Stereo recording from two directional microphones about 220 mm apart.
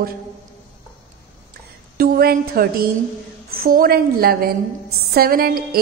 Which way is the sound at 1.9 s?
45° right (ahead or behind).